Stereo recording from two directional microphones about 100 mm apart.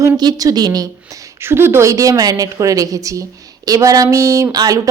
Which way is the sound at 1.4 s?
25° right (ahead or behind).